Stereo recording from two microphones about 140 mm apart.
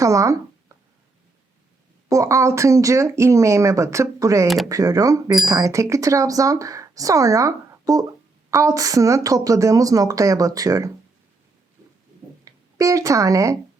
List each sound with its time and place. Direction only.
0.0 s speech: 25° right (ahead or behind)
2.0 s speech: 20° right (ahead or behind)
4.4 s speech: centre (ahead or behind)
4.7 s speech: 25° right (ahead or behind)
12.7 s speech: 25° right (ahead or behind)